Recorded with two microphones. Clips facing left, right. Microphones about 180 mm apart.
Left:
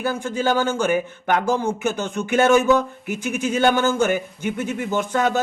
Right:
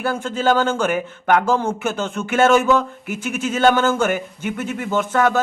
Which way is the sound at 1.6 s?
55° right (ahead or behind).